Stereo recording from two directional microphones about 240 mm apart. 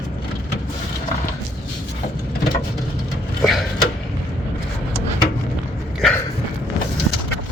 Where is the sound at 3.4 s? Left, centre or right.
Centre.